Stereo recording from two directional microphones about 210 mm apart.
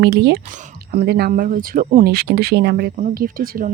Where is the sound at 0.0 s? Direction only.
55° right (ahead or behind).